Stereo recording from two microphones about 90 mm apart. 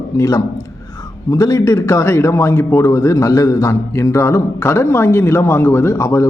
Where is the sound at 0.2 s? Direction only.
40° left (ahead or behind).